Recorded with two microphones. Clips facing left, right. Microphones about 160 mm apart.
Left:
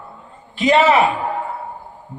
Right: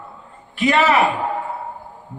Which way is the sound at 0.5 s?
25° left (ahead or behind).